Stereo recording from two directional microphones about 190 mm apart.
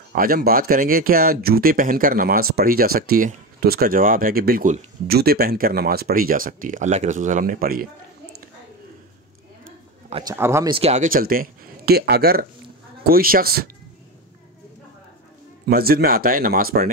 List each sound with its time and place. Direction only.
0.1 s speech: 50° right (ahead or behind)
10.2 s speech: 15° right (ahead or behind)
10.7 s speech: 35° right (ahead or behind); by 13.7 s 50° right (ahead or behind)
15.6 s speech: 55° right (ahead or behind)